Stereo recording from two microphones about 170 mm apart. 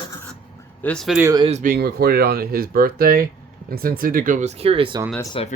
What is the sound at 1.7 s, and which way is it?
Speech, 65° right (ahead or behind).